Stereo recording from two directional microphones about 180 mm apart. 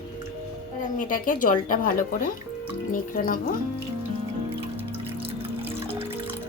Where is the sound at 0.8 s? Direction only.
50° left (ahead or behind).